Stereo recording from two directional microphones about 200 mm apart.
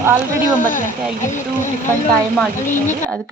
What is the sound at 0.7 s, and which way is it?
Speech, 40° left (ahead or behind).